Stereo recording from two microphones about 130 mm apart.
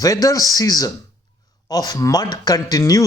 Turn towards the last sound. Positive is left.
turn(degrees=25)  # may be behind; listen again after turning